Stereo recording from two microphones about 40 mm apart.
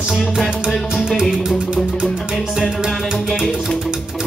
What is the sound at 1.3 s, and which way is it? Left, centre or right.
Music, centre.